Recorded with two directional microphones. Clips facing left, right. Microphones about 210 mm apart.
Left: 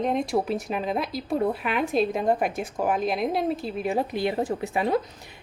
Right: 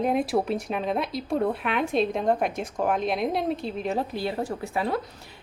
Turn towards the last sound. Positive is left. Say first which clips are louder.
# left 3 dB
turn(degrees=20)  # may be behind; listen again after turning